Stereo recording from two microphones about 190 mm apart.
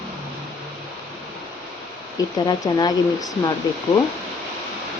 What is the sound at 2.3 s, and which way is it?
Speech, 20° left (ahead or behind).